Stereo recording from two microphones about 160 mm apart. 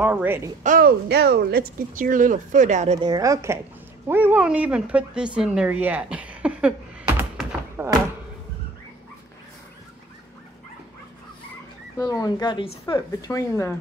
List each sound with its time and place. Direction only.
0.0 s speech: 10° right (ahead or behind)
0.7 s speech: 70° right (ahead or behind); by 3.0 s 50° right (ahead or behind)
3.0 s a woman's voice: 25° right (ahead or behind); by 6.7 s 5° right (ahead or behind)
7.2 s a sound: 15° right (ahead or behind)
12.0 s speech: 25° left (ahead or behind)